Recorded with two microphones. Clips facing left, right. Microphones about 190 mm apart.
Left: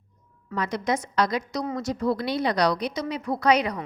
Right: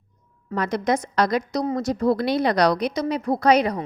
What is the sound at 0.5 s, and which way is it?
A woman's voice, 45° right (ahead or behind).